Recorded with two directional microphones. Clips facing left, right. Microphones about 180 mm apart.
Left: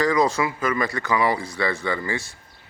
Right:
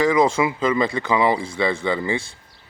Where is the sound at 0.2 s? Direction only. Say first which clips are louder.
Right 3 dB; 25° right (ahead or behind).